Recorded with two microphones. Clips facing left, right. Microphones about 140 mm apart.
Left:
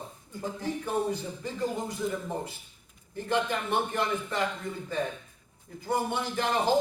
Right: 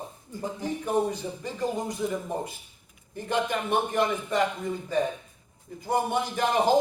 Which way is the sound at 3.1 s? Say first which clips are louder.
Right 1 dB; 15° right (ahead or behind).